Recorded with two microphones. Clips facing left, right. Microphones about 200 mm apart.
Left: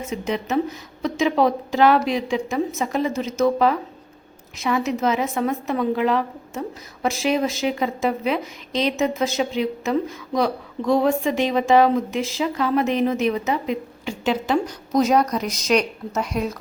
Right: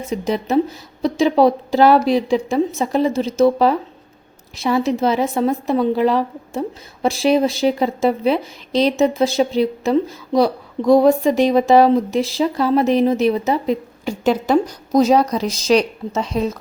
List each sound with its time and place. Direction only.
0.0 s a woman's voice: 35° right (ahead or behind)